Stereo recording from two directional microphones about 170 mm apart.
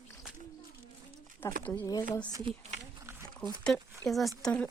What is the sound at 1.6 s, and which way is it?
Speech, 10° left (ahead or behind).